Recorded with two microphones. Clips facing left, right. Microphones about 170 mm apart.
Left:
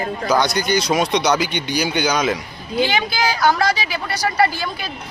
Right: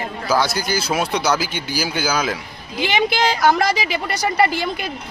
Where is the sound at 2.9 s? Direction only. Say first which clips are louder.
Right 2 dB; 20° right (ahead or behind).